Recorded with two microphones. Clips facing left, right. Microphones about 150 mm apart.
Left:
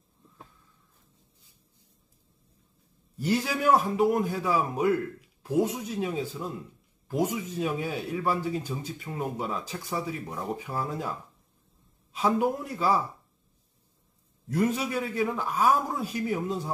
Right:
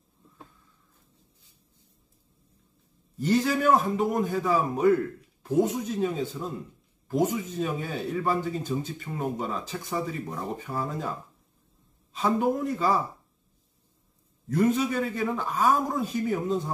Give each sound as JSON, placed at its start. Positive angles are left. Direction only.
{"t": 3.2, "sound": "speech", "side_deg": 10}
{"t": 14.5, "sound": "speech", "side_deg": 10}